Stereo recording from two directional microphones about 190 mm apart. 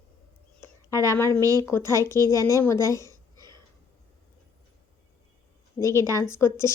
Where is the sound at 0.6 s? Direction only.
15° left (ahead or behind).